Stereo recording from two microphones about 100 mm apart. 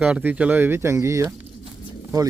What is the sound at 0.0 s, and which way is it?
Speech, 15° right (ahead or behind).